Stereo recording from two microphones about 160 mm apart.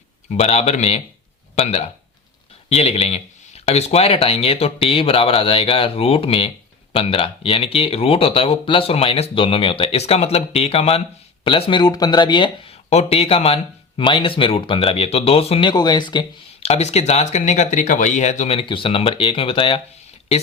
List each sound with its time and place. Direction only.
0.3 s speech: 40° left (ahead or behind)
15.7 s speech: 25° left (ahead or behind)
16.6 s speech: 40° left (ahead or behind)